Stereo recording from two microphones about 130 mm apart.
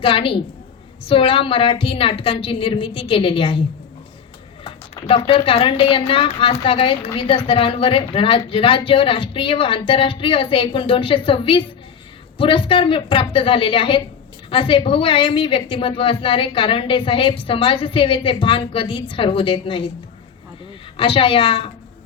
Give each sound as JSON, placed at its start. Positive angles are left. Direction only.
{"t": 0.0, "sound": "a woman's voice", "side_deg": 45}
{"t": 4.6, "sound": "a woman's voice", "side_deg": 45}
{"t": 20.9, "sound": "a woman's voice", "side_deg": 45}